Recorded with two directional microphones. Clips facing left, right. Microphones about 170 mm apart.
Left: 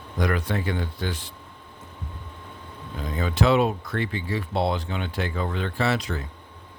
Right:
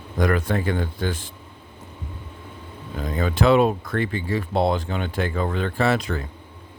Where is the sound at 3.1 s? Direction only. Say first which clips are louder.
Right 3 dB; 55° right (ahead or behind).